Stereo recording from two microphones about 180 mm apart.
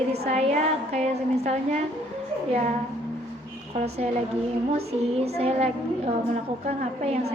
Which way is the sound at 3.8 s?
35° right (ahead or behind).